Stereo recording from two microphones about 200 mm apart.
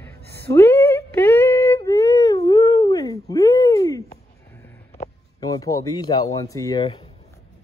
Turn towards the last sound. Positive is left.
turn(degrees=15)  # may be behind; listen again after turning